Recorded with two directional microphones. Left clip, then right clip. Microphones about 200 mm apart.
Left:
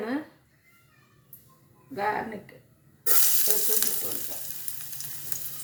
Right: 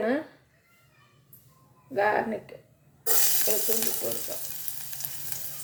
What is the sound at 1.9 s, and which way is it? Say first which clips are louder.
Speech: right 4 dB; 35° right (ahead or behind).